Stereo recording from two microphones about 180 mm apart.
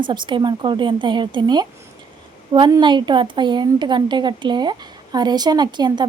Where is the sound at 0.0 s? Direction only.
25° right (ahead or behind).